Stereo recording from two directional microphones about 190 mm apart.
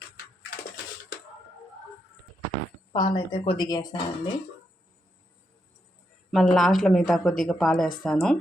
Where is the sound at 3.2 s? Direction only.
25° left (ahead or behind).